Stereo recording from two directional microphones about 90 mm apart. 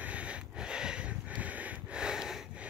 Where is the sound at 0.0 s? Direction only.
15° right (ahead or behind).